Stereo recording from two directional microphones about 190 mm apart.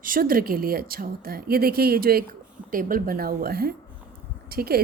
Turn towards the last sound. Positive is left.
turn(degrees=-55)  # may be behind; listen again after turning